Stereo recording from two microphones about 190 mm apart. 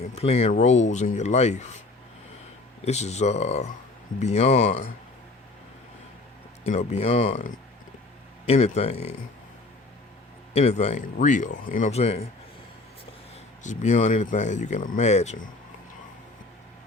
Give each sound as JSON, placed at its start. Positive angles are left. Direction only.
{"t": 0.2, "sound": "speech", "side_deg": 35}
{"t": 2.8, "sound": "speech", "side_deg": 35}
{"t": 6.7, "sound": "speech", "side_deg": 35}
{"t": 10.5, "sound": "speech", "side_deg": 35}
{"t": 13.7, "sound": "speech", "side_deg": 40}